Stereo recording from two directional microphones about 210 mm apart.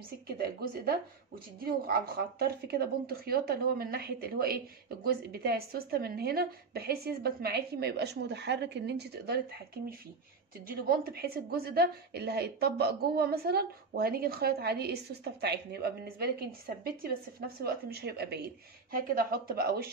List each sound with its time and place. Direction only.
0.3 s a woman's voice: 50° right (ahead or behind)